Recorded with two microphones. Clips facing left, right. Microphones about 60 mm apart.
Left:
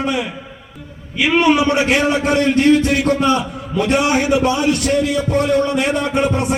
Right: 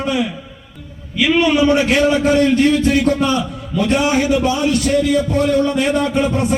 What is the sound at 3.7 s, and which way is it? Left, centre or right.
A man's voice, left.